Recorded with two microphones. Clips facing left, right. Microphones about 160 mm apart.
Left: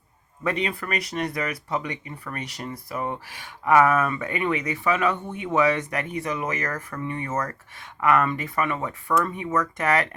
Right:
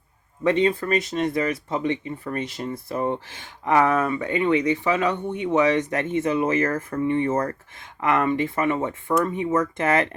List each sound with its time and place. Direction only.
0.4 s speech: 25° right (ahead or behind)